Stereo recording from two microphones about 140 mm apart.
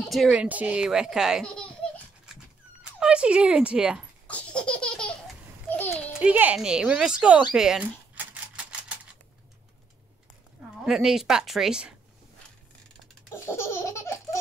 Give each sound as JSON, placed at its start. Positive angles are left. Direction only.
{"t": 0.3, "sound": "speech", "side_deg": -10}
{"t": 2.8, "sound": "speech", "side_deg": -5}
{"t": 4.3, "sound": "baby laughter", "side_deg": 10}
{"t": 6.1, "sound": "speech", "side_deg": -10}
{"t": 7.5, "sound": "typewriter", "side_deg": -5}
{"t": 10.9, "sound": "speech", "side_deg": -5}
{"t": 13.3, "sound": "laughter", "side_deg": 20}